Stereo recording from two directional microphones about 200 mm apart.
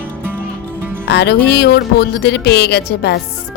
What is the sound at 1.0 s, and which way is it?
A woman's voice, 55° left (ahead or behind).